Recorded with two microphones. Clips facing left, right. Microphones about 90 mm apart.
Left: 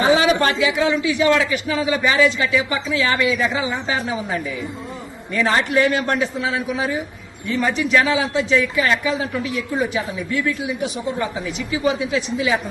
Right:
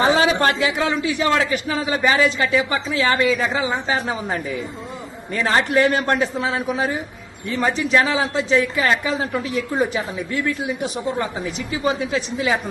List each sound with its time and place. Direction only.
0.2 s a man's voice: 35° right (ahead or behind)